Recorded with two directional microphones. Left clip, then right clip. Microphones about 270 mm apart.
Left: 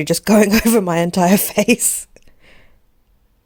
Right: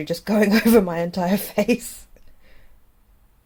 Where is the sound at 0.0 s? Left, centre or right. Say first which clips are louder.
Left 7 dB; left.